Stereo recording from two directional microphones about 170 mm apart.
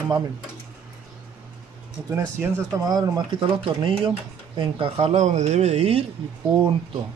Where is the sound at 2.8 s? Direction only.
20° right (ahead or behind).